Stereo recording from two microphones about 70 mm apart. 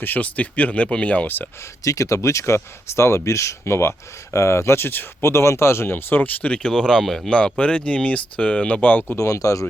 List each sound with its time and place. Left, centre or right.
0.0 s speech: left
1.8 s speech: left; by 7.3 s centre
7.3 s speech: centre
9.1 s speech: left